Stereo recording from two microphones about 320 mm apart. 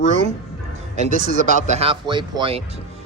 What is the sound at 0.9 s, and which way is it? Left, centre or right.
Speech, right.